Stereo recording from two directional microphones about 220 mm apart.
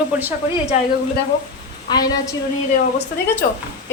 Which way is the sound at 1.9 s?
15° left (ahead or behind).